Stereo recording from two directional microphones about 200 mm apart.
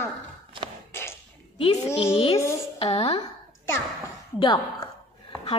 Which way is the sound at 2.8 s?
30° left (ahead or behind).